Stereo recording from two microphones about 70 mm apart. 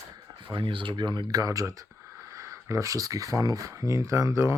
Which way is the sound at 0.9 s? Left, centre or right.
Right.